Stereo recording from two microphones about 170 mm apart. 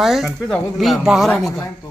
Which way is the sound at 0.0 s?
Centre (ahead or behind).